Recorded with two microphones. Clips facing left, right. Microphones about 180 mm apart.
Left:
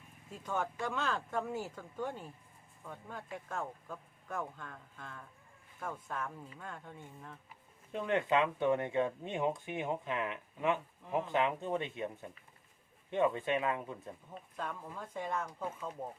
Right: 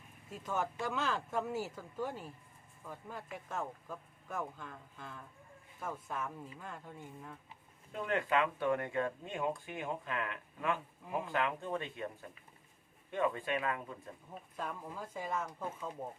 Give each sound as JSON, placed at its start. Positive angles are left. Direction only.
{"t": 0.3, "sound": "speech", "side_deg": -5}
{"t": 8.0, "sound": "speech", "side_deg": 20}
{"t": 14.3, "sound": "speech", "side_deg": -5}